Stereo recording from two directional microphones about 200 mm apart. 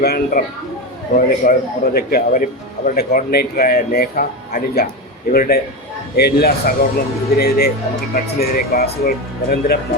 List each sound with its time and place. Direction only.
0.0 s a man's voice: 45° left (ahead or behind)